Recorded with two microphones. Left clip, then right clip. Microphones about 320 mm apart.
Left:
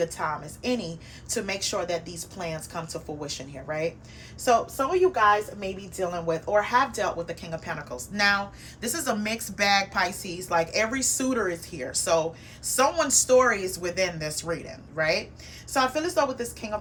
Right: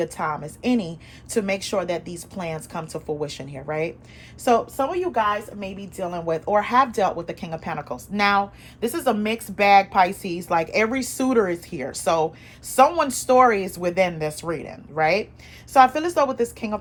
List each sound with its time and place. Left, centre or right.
0.0 s a woman's voice: right